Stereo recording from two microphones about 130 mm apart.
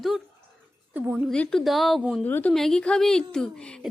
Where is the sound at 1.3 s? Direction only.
5° left (ahead or behind).